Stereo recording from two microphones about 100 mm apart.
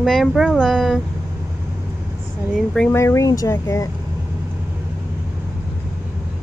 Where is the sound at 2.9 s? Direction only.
25° left (ahead or behind).